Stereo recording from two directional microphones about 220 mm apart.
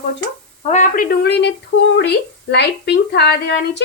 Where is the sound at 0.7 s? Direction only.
35° left (ahead or behind).